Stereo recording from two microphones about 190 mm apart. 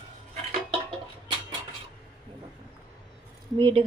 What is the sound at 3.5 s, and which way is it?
Speech, 30° right (ahead or behind).